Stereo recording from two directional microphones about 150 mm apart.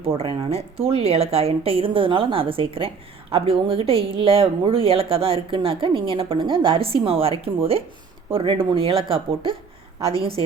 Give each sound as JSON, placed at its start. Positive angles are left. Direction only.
{"t": 0.2, "sound": "speech", "side_deg": -40}